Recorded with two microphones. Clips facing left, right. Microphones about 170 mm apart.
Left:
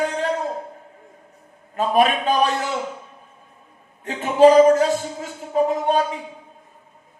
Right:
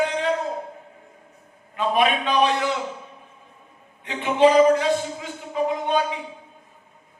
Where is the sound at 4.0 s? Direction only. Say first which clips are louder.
Left 4 dB; 40° left (ahead or behind).